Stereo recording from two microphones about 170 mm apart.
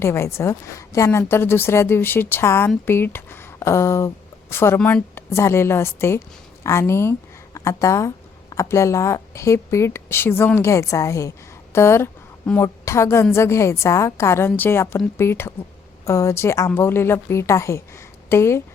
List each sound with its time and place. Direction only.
0.0 s a woman's voice: 15° left (ahead or behind)